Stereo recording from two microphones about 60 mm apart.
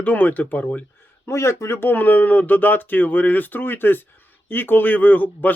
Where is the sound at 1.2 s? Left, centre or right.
Left.